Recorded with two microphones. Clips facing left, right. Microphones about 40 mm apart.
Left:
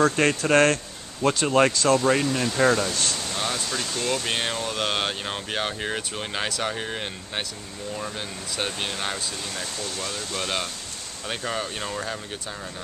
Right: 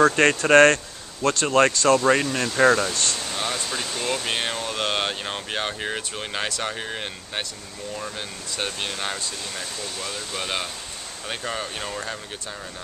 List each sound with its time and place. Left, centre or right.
0.0 s speech: centre
1.2 s speech: centre
2.9 s speech: centre